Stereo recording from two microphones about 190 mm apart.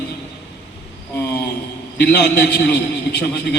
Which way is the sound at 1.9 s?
60° left (ahead or behind).